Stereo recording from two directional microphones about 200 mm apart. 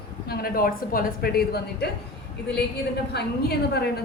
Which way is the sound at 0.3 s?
50° left (ahead or behind).